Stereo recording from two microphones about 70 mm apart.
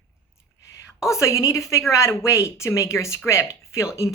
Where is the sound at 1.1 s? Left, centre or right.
Left.